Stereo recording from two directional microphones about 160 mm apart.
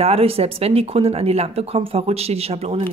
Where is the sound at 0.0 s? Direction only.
40° right (ahead or behind).